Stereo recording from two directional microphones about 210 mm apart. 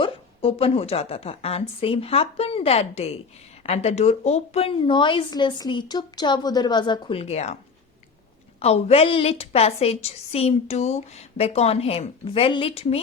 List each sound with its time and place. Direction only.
0.0 s a woman's voice: 25° left (ahead or behind)
8.5 s a woman's voice: 30° left (ahead or behind)